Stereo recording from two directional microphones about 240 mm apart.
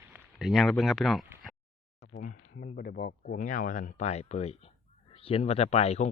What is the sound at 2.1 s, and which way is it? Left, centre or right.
Speech, left.